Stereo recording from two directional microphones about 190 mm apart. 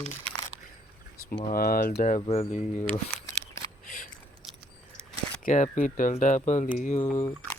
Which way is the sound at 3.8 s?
45° left (ahead or behind).